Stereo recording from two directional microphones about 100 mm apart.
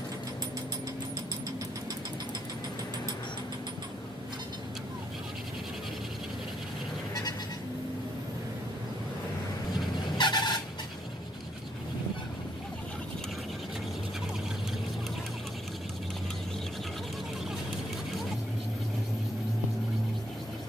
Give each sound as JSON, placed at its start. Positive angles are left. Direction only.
{"t": 10.1, "sound": "vehicle", "side_deg": 50}